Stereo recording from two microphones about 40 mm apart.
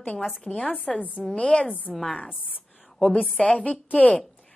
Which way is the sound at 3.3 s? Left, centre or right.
Left.